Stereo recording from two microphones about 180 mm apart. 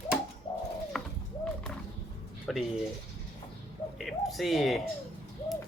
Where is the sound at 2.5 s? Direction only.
Centre (ahead or behind).